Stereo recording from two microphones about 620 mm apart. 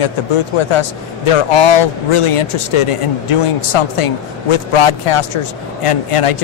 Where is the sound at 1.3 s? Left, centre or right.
Left.